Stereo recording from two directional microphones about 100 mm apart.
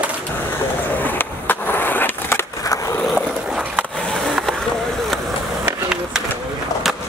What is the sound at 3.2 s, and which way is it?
Skateboard, 5° right (ahead or behind).